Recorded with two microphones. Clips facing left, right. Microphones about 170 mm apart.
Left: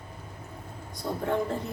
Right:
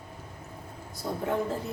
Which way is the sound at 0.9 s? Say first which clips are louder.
Left 1 dB; 5° right (ahead or behind).